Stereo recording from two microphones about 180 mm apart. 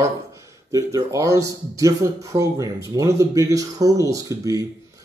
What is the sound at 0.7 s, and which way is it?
Speech, 20° right (ahead or behind).